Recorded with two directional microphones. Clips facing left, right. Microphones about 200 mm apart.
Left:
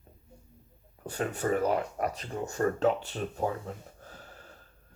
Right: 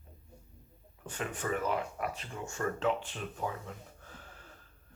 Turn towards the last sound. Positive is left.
turn(degrees=40)  # may be behind; listen again after turning